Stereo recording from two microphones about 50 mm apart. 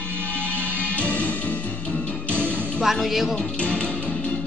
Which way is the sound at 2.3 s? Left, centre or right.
Right.